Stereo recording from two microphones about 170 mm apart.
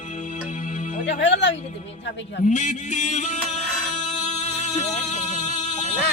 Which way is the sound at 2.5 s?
45° left (ahead or behind).